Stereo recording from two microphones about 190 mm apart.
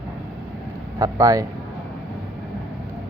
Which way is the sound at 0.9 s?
20° right (ahead or behind).